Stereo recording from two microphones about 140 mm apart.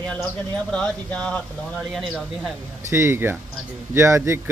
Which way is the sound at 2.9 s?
15° right (ahead or behind).